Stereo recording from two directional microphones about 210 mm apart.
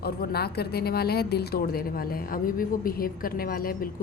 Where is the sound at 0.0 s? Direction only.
50° left (ahead or behind).